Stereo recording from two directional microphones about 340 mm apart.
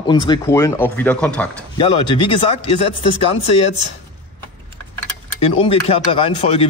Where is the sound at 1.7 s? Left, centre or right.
Centre.